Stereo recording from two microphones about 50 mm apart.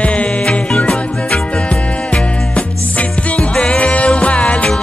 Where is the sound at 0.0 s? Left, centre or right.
Left.